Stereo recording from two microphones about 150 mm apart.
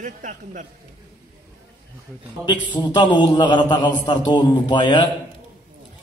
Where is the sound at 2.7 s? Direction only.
30° left (ahead or behind).